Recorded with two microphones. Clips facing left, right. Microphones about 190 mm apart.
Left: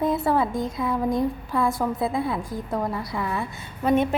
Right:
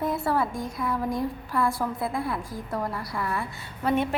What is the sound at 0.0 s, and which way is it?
Speech, 20° left (ahead or behind).